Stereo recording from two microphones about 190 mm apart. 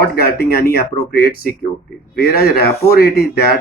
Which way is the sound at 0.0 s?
55° left (ahead or behind).